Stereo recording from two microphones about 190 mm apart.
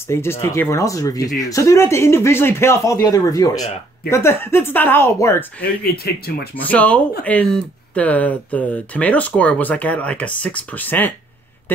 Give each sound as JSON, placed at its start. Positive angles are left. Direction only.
{"t": 0.1, "sound": "speech", "side_deg": 15}
{"t": 6.0, "sound": "speech", "side_deg": 55}
{"t": 6.5, "sound": "speech", "side_deg": 10}